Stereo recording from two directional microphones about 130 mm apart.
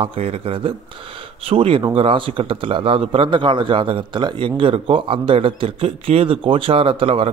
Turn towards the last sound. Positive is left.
turn(degrees=-45)  # may be behind; listen again after turning